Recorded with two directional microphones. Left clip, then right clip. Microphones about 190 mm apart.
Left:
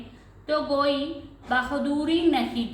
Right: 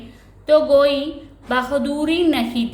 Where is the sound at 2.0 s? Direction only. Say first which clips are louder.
Right 3 dB; 50° right (ahead or behind).